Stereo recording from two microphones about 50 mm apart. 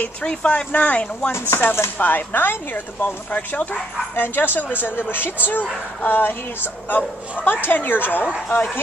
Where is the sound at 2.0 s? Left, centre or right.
Left.